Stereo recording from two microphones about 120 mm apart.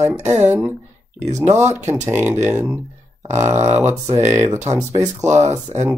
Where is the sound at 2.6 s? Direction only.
Centre (ahead or behind).